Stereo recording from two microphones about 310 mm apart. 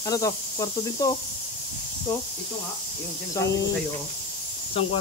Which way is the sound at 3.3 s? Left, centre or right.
Centre.